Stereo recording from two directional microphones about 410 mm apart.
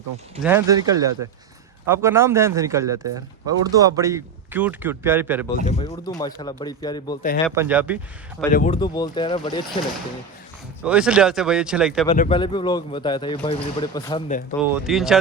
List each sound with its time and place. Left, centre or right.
0.4 s a man's voice: centre
5.8 s speech: centre
7.4 s speech: centre
8.5 s speech: centre
10.8 s speech: centre
12.0 s speech: centre
14.6 s speech: centre